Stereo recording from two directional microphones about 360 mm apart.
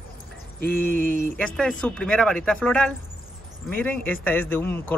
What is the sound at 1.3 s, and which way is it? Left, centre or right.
Speech, centre.